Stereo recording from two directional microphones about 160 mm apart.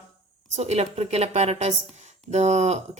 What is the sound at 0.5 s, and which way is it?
A woman's voice, 45° right (ahead or behind).